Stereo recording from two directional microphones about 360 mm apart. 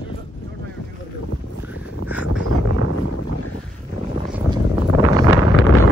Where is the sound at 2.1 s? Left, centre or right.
Centre.